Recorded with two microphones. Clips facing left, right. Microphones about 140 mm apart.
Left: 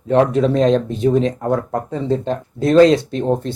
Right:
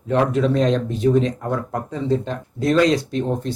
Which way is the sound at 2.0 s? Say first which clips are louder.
Even; 30° left (ahead or behind).